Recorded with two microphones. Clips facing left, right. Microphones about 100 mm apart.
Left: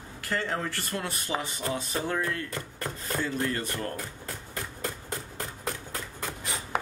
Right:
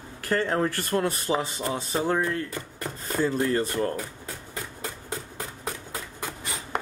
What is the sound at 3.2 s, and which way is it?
Speech, 35° right (ahead or behind).